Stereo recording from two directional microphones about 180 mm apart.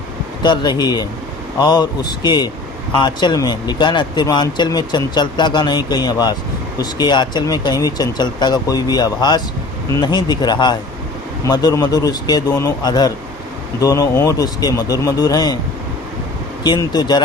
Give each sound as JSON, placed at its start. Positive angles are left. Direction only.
{"t": 0.4, "sound": "speech", "side_deg": 25}
{"t": 16.6, "sound": "speech", "side_deg": 25}